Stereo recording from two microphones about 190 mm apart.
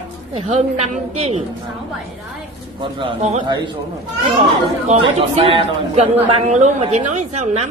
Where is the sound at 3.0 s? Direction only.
35° right (ahead or behind).